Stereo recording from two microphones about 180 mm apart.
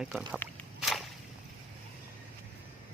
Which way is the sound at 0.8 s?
Centre (ahead or behind).